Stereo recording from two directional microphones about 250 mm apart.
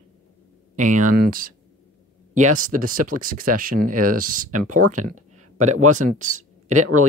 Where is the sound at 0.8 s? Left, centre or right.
Right.